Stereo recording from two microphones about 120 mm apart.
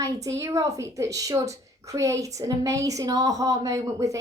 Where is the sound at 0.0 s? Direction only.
25° right (ahead or behind).